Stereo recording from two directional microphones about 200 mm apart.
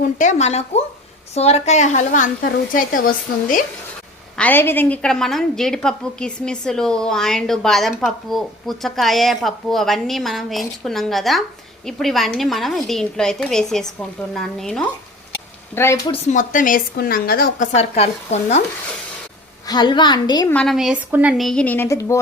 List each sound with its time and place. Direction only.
0.0 s speech: 35° left (ahead or behind)
4.4 s a woman's voice: 10° left (ahead or behind)
15.7 s speech: 15° left (ahead or behind)
16.1 s a woman's voice: 40° left (ahead or behind)
17.7 s speech: 30° left (ahead or behind)
19.6 s a woman's voice: 20° left (ahead or behind)
20.5 s a woman's voice: 5° left (ahead or behind)